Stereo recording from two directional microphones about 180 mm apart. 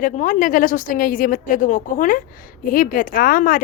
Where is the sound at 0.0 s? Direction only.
45° left (ahead or behind).